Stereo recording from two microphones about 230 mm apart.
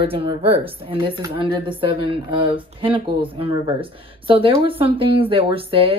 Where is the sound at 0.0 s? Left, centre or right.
Right.